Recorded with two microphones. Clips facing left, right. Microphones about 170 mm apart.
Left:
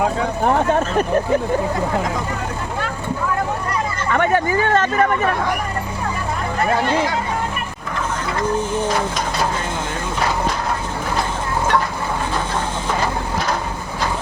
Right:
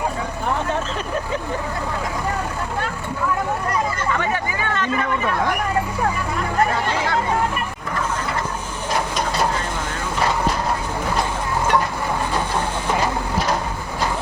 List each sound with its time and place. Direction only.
0.0 s speech: 55° left (ahead or behind)
4.1 s speech: 55° left (ahead or behind)